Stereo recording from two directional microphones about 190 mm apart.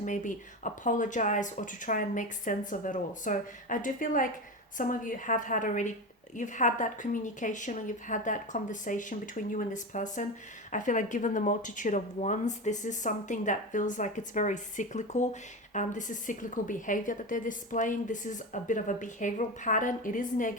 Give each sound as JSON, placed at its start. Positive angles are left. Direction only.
{"t": 0.0, "sound": "speech", "side_deg": 40}